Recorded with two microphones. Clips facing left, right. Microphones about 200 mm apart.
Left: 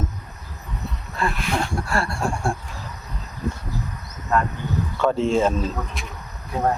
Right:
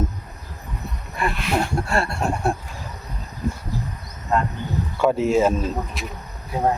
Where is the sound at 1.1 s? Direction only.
15° right (ahead or behind).